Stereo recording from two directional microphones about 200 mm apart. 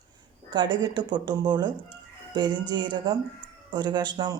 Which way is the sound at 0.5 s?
20° right (ahead or behind).